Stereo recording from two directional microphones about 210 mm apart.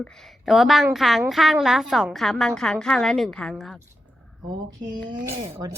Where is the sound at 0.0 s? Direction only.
Centre (ahead or behind).